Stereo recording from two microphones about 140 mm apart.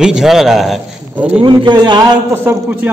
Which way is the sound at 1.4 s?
35° right (ahead or behind).